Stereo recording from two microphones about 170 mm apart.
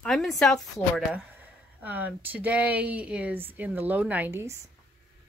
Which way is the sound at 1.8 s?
10° right (ahead or behind).